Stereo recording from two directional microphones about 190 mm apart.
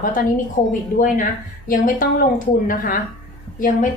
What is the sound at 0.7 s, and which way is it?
A woman's voice, 45° left (ahead or behind).